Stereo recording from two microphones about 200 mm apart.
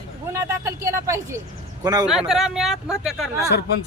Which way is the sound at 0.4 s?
15° right (ahead or behind).